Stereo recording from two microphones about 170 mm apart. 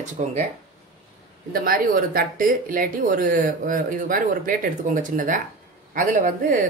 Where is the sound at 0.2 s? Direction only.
45° right (ahead or behind).